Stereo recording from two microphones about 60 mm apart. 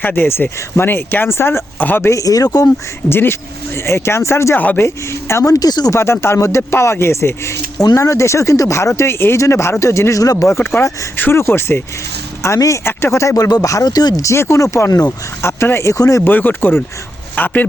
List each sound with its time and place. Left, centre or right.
0.0 s speech: left
1.8 s speech: left
2.0 s speech: left
3.1 s speech: left
4.5 s speech: left
5.5 s speech: left
6.0 s speech: left
9.0 s speech: left
11.2 s speech: left
12.5 s speech: left
12.8 s speech: left
14.3 s speech: left
15.4 s speech: left
16.2 s speech: left